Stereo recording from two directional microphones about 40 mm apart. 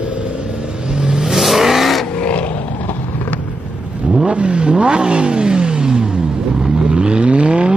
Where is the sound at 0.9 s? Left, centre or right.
Centre.